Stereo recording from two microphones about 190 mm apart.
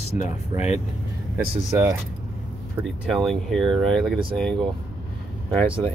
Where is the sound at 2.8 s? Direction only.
Centre (ahead or behind).